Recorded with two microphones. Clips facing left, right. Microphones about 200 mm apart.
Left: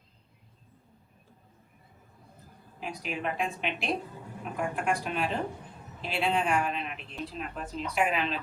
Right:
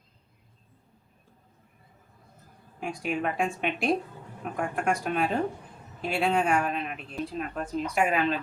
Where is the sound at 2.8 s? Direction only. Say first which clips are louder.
Right 4 dB; 45° right (ahead or behind).